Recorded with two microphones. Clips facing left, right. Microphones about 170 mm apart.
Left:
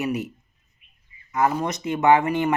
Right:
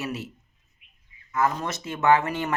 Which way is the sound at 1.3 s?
15° left (ahead or behind).